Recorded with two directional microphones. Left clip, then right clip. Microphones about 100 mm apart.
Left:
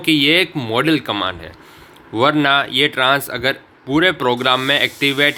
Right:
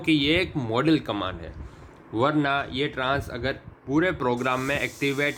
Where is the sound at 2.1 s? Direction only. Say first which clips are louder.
Left 9 dB; 30° left (ahead or behind).